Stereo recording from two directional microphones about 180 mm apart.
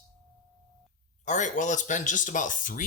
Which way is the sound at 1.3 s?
45° left (ahead or behind).